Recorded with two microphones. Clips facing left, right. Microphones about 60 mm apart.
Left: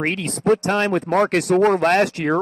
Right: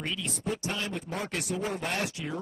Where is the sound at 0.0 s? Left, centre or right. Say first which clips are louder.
Left 13 dB; left.